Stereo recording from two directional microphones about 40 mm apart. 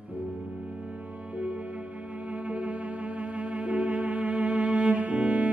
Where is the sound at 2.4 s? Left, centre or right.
Right.